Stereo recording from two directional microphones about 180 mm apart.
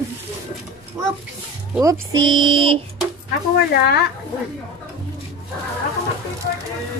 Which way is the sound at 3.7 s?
65° left (ahead or behind).